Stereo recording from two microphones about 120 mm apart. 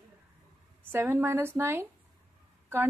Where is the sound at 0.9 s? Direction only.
20° right (ahead or behind).